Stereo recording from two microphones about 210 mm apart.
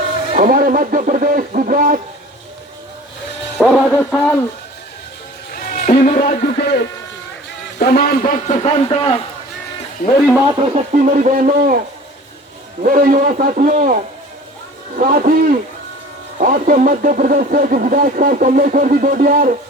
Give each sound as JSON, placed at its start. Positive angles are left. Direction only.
{"t": 0.3, "sound": "speech", "side_deg": -40}
{"t": 3.6, "sound": "a man's voice", "side_deg": 0}
{"t": 5.5, "sound": "music", "side_deg": 40}
{"t": 6.1, "sound": "a man's voice", "side_deg": 50}
{"t": 10.2, "sound": "a man's voice", "side_deg": 5}
{"t": 10.4, "sound": "speech", "side_deg": -20}
{"t": 10.9, "sound": "speech", "side_deg": -40}
{"t": 12.8, "sound": "a man's voice", "side_deg": -40}